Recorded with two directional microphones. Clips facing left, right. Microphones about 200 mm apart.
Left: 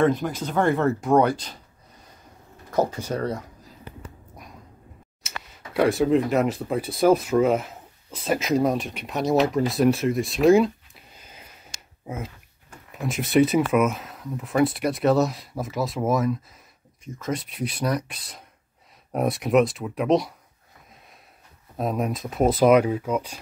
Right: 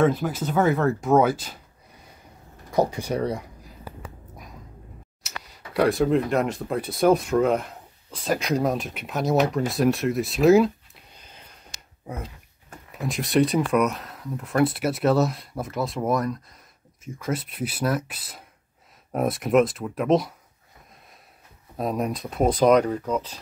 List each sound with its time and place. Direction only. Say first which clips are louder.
0.0 s speech: even; 5° right (ahead or behind)
2.7 s speech: right 1 dB; 15° right (ahead or behind)
5.2 s speech: left 1 dB; centre (ahead or behind)
11.1 s a sound: left 2 dB; 5° left (ahead or behind)
12.9 s speech: left 2 dB; centre (ahead or behind)
21.7 s speech: even; centre (ahead or behind)